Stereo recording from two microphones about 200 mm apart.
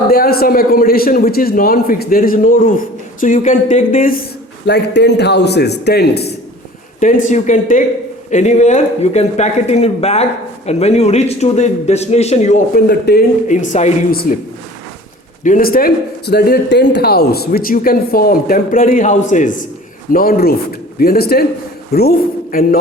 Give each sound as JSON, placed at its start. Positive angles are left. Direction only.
{"t": 0.1, "sound": "speech", "side_deg": 50}
{"t": 4.6, "sound": "a man's voice", "side_deg": 55}
{"t": 7.3, "sound": "speech", "side_deg": 35}
{"t": 15.4, "sound": "speech", "side_deg": 45}